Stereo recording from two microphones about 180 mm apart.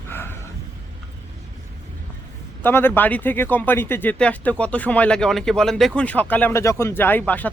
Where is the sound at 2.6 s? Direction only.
10° left (ahead or behind).